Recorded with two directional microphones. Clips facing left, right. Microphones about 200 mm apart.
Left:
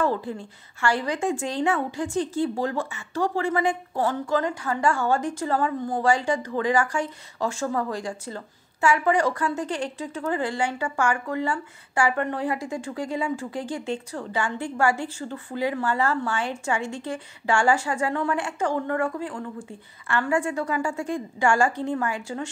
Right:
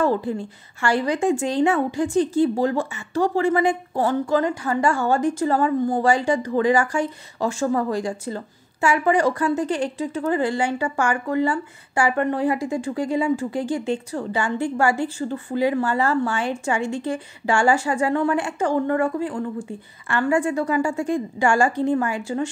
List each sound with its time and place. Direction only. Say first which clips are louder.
0.7 s a woman's voice: right 4 dB; 15° right (ahead or behind)